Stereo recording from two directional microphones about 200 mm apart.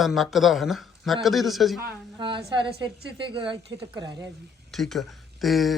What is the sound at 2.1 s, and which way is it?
Speech, 25° right (ahead or behind).